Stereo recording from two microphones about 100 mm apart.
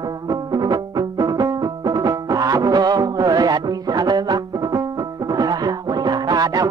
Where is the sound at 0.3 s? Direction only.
40° right (ahead or behind).